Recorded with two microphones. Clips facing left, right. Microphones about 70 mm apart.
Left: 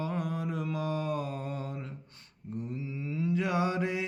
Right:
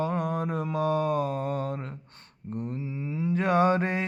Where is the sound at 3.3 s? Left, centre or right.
Right.